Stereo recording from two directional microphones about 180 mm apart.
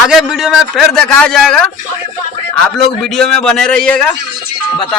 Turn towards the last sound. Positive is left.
turn(degrees=5)  # may be behind; listen again after turning